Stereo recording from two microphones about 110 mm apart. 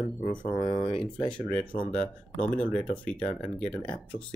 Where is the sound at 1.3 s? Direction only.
10° left (ahead or behind).